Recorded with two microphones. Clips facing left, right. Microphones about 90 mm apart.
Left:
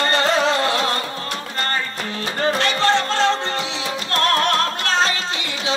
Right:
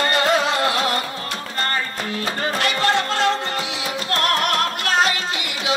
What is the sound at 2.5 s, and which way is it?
Music, 30° left (ahead or behind).